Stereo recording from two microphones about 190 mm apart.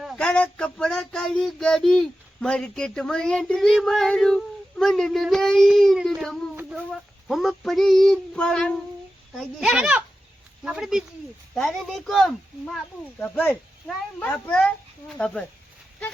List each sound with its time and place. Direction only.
0.0 s child singing: centre (ahead or behind)
12.7 s speech: 5° left (ahead or behind)
15.2 s child singing: 5° left (ahead or behind)